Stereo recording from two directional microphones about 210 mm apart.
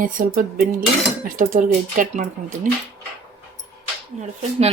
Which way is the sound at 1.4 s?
40° right (ahead or behind).